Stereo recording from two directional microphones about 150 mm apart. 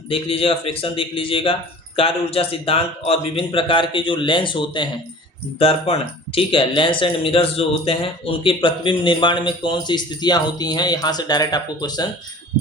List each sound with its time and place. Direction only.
0.1 s speech: 40° left (ahead or behind)